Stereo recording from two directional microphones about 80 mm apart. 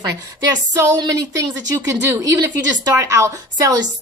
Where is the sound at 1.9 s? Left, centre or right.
Right.